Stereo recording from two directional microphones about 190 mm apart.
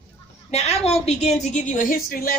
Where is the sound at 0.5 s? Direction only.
35° left (ahead or behind).